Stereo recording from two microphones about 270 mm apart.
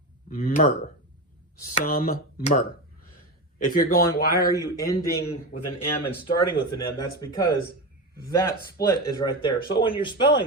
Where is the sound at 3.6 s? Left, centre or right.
Left.